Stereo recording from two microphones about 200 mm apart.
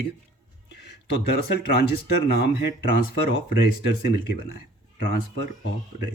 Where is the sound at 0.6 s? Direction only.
55° left (ahead or behind).